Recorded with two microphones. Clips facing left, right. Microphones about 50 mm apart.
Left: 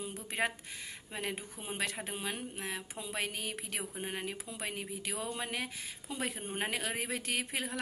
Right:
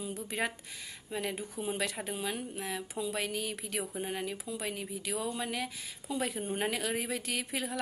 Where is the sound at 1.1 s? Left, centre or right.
Left.